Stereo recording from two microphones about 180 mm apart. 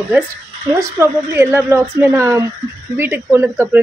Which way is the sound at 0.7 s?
15° right (ahead or behind).